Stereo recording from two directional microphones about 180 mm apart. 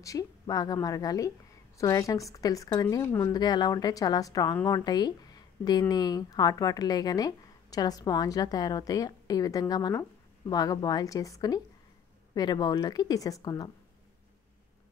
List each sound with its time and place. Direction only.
0.0 s a woman's voice: 20° left (ahead or behind)